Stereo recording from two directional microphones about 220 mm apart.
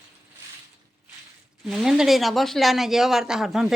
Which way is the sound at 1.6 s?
Centre (ahead or behind).